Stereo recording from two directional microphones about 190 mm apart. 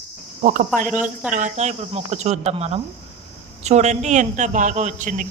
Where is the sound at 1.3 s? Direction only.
40° right (ahead or behind).